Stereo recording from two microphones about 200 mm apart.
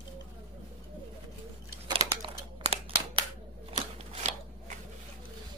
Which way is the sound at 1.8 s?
25° right (ahead or behind).